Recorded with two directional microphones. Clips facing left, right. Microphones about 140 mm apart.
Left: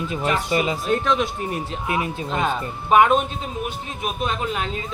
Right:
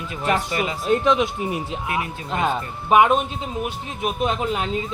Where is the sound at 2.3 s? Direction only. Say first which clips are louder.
Right 2 dB; 10° right (ahead or behind).